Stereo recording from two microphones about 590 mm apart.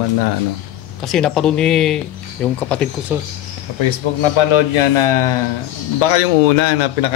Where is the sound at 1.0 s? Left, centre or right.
Centre.